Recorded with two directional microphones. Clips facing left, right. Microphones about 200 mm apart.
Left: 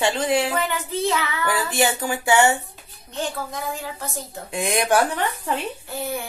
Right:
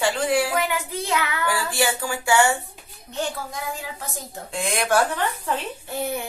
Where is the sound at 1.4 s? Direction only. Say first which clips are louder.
Left 4 dB; 20° left (ahead or behind).